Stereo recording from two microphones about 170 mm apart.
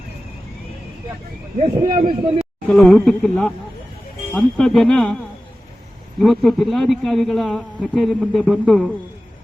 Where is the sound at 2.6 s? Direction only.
5° left (ahead or behind).